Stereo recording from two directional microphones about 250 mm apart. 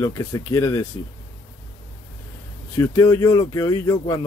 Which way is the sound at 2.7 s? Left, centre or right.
Centre.